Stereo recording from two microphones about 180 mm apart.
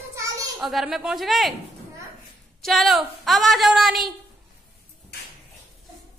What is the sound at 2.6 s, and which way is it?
A woman's voice, centre (ahead or behind).